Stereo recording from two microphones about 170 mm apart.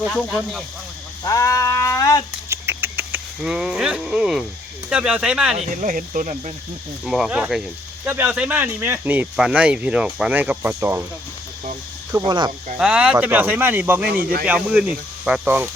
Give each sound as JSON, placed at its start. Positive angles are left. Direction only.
{"t": 0.1, "sound": "speech", "side_deg": 5}
{"t": 1.2, "sound": "sheep", "side_deg": 20}
{"t": 2.5, "sound": "a sound", "side_deg": -15}
{"t": 4.9, "sound": "speech", "side_deg": -5}
{"t": 5.5, "sound": "speech", "side_deg": -50}
{"t": 7.0, "sound": "speech", "side_deg": -5}
{"t": 12.2, "sound": "speech", "side_deg": -25}
{"t": 12.7, "sound": "speech", "side_deg": -5}
{"t": 14.1, "sound": "speech", "side_deg": -60}
{"t": 14.4, "sound": "speech", "side_deg": -10}